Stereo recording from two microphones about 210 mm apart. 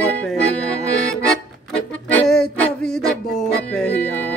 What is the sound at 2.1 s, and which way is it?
Music, 5° left (ahead or behind).